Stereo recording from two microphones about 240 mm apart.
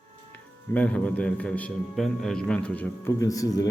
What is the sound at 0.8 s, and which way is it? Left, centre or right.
A man's voice, centre.